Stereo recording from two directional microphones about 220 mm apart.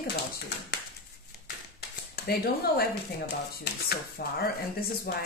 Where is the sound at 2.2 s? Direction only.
45° left (ahead or behind).